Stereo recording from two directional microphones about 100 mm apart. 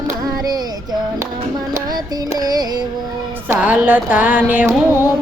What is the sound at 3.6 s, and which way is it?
Speech, 15° right (ahead or behind).